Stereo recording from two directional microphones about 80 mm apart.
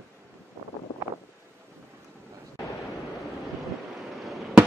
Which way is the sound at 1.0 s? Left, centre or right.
Right.